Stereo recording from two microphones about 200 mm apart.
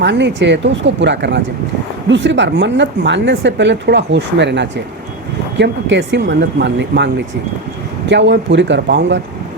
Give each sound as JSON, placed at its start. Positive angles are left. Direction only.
{"t": 0.0, "sound": "speech", "side_deg": -60}